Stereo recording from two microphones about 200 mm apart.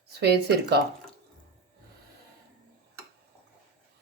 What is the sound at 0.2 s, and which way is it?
Speech, 55° right (ahead or behind).